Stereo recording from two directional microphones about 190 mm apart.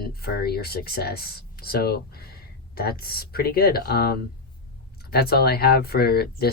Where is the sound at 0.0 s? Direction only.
55° left (ahead or behind).